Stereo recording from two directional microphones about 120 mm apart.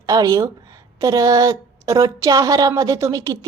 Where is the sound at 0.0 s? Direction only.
30° right (ahead or behind).